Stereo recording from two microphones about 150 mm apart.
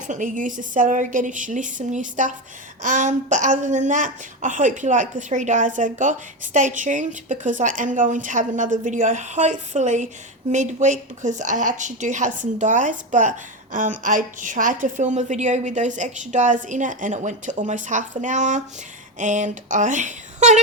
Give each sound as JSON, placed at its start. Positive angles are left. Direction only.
{"t": 0.1, "sound": "a woman's voice", "side_deg": -60}